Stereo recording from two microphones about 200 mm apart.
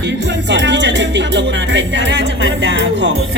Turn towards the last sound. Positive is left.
turn(degrees=-65)  # may be behind; listen again after turning